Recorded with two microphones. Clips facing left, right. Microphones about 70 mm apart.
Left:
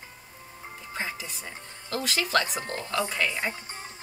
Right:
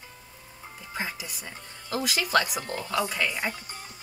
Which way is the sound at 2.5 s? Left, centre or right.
Left.